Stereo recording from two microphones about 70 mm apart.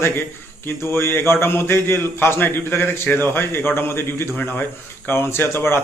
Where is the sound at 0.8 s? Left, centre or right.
Left.